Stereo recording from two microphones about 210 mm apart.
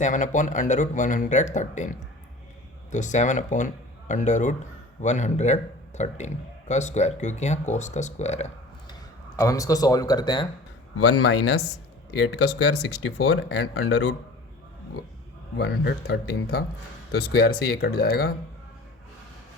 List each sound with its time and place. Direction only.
0.0 s a man's voice: 35° left (ahead or behind)
8.9 s speech: 15° left (ahead or behind)
10.9 s speech: 90° left; by 11.5 s 75° left (ahead or behind)
12.1 s speech: 55° left (ahead or behind)
15.5 s speech: 50° left (ahead or behind)